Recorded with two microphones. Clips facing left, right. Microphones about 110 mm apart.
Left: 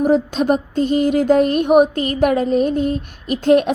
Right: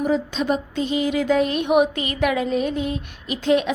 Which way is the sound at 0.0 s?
50° left (ahead or behind).